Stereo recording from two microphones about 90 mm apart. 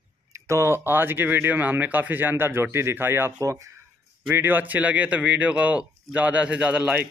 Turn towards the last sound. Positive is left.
turn(degrees=-15)  # may be behind; listen again after turning